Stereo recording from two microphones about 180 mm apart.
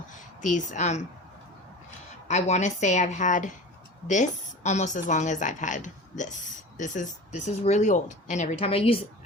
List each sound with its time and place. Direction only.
0.1 s a woman's voice: 45° left (ahead or behind)
2.2 s a woman's voice: 40° left (ahead or behind)